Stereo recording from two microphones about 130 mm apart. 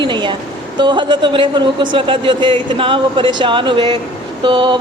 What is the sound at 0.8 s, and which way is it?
A woman's voice, 35° right (ahead or behind).